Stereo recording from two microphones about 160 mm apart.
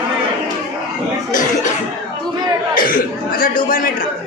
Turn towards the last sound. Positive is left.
turn(degrees=60)  # may be behind; listen again after turning